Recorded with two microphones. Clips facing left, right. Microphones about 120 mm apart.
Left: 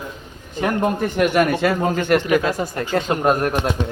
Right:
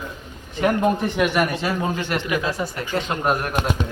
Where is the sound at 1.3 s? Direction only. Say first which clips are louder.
Left 5 dB; 55° left (ahead or behind).